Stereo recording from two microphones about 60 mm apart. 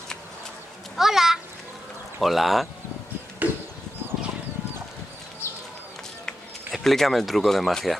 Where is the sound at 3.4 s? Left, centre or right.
Right.